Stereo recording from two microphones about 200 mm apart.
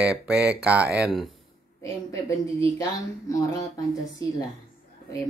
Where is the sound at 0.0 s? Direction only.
5° right (ahead or behind).